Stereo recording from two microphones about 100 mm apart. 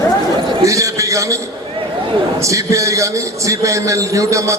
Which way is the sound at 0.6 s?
30° right (ahead or behind).